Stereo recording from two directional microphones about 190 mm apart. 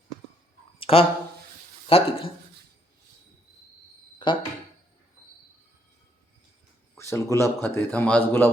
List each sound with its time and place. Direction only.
0.8 s a sound: 30° left (ahead or behind)
1.9 s speech: 30° left (ahead or behind)
4.2 s speech: 25° left (ahead or behind)
6.9 s a man's voice: 15° left (ahead or behind)